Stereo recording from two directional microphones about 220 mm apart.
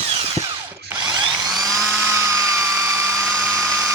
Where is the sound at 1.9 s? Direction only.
10° right (ahead or behind).